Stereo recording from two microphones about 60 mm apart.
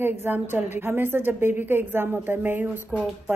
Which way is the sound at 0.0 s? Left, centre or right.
Right.